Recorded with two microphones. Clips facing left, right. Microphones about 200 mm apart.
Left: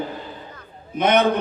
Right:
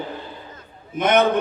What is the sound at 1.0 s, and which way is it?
Speech, 50° right (ahead or behind).